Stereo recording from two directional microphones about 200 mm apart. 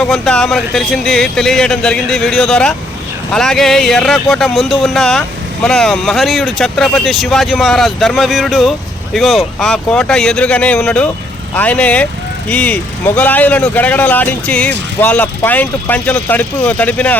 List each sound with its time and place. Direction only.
0.0 s speech: 5° left (ahead or behind)